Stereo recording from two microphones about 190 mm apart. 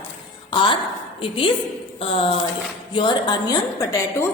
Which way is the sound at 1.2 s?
25° left (ahead or behind).